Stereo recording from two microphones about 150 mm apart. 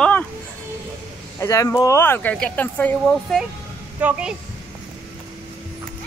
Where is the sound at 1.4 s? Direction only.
20° left (ahead or behind).